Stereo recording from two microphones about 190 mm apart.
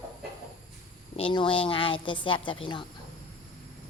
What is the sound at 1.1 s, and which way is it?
A woman's voice, 30° left (ahead or behind).